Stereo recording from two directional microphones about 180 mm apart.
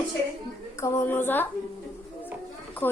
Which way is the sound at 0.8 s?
15° left (ahead or behind).